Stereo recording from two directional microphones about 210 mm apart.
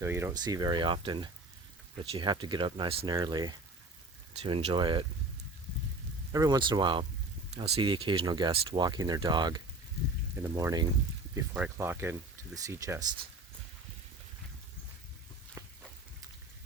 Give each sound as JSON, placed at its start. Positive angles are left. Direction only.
{"t": 0.0, "sound": "speech", "side_deg": -10}
{"t": 6.3, "sound": "speech", "side_deg": -15}
{"t": 15.6, "sound": "a sound", "side_deg": -15}